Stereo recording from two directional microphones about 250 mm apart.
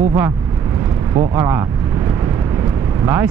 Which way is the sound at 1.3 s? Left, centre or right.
Centre.